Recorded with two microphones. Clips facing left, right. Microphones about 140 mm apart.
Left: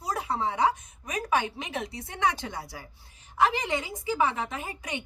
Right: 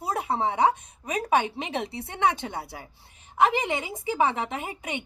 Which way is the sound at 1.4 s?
20° right (ahead or behind).